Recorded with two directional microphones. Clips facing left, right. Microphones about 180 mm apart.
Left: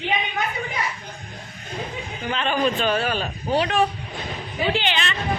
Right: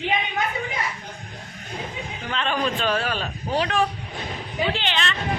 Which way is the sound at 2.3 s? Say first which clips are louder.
Left 3 dB; 5° left (ahead or behind).